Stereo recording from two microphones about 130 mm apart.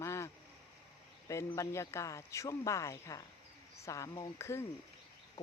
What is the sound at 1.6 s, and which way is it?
Speech, 20° left (ahead or behind).